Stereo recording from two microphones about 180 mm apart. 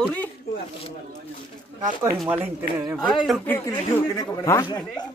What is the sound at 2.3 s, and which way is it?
Speech, 10° right (ahead or behind).